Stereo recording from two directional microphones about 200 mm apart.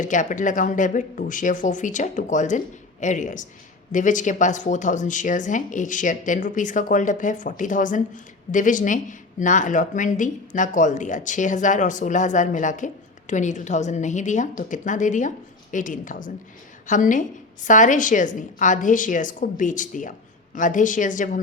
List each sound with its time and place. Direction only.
0.0 s speech: 40° left (ahead or behind)